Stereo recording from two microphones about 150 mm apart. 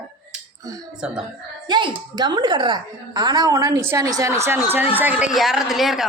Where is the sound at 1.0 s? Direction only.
5° right (ahead or behind).